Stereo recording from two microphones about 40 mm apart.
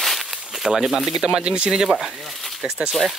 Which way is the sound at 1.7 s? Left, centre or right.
Centre.